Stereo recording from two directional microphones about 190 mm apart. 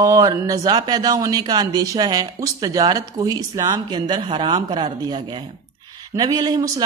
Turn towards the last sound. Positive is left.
turn(degrees=-20)  # may be behind; listen again after turning